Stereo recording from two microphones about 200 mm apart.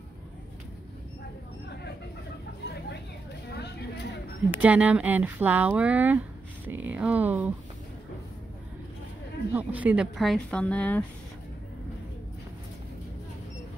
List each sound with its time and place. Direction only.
3.4 s a sound: 55° left (ahead or behind)
4.6 s speech: 5° right (ahead or behind)
9.5 s speech: 10° right (ahead or behind)